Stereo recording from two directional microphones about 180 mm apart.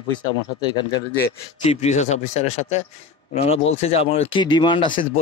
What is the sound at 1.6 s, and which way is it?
A man's voice, 35° left (ahead or behind).